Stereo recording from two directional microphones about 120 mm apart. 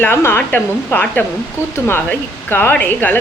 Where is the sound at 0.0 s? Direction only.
20° left (ahead or behind).